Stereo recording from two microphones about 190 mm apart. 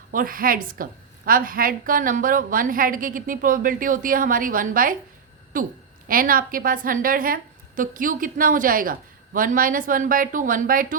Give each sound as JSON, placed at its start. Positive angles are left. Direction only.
{"t": 0.1, "sound": "a woman's voice", "side_deg": -45}